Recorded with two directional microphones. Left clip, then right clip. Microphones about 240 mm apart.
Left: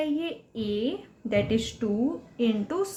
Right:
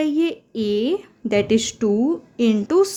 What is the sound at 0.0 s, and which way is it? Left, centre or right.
Speech, right.